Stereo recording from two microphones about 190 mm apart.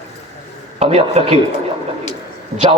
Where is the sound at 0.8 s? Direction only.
30° right (ahead or behind).